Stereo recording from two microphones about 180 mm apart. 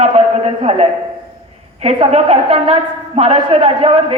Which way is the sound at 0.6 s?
35° right (ahead or behind).